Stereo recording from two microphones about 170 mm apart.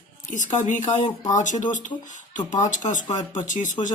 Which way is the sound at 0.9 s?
25° left (ahead or behind).